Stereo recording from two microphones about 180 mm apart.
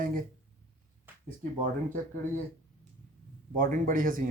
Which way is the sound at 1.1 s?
10° right (ahead or behind).